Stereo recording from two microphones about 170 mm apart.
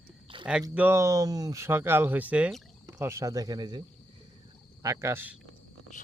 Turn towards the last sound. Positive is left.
turn(degrees=-15)  # may be behind; listen again after turning